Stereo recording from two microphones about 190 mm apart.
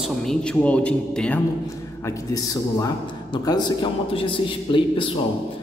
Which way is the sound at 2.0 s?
15° left (ahead or behind).